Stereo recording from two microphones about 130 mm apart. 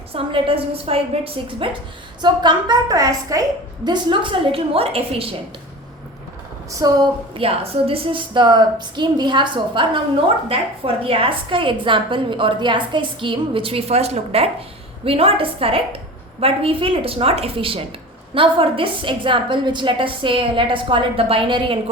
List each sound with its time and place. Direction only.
0.1 s a woman's voice: 45° right (ahead or behind)
6.7 s a woman's voice: 30° right (ahead or behind)
7.3 s a woman's voice: 45° right (ahead or behind)